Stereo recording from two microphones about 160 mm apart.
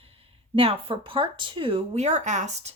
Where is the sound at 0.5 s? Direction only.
35° right (ahead or behind).